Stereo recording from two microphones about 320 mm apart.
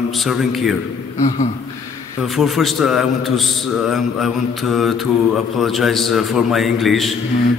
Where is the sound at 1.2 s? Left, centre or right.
Left.